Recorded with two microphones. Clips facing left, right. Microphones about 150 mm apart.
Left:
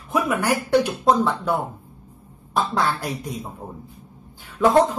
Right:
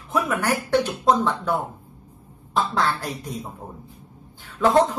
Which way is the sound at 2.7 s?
10° left (ahead or behind).